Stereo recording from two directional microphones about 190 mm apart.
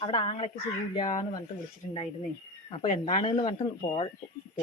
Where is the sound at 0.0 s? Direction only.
30° left (ahead or behind).